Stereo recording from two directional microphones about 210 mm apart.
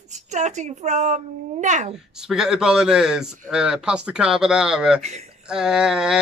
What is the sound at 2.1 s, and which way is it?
Speech, centre (ahead or behind).